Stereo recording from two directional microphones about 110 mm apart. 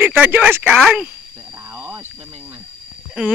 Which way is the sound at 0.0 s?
20° right (ahead or behind).